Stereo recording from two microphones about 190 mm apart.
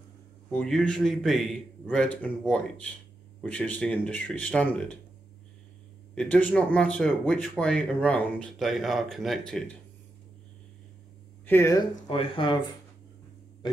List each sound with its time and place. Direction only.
0.5 s speech: 5° left (ahead or behind)
6.1 s speech: 5° left (ahead or behind)
11.4 s speech: 15° left (ahead or behind)
12.1 s speech: 25° left (ahead or behind)